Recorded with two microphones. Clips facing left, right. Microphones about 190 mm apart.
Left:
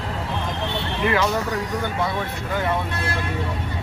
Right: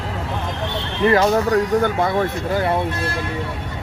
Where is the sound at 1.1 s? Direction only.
45° right (ahead or behind).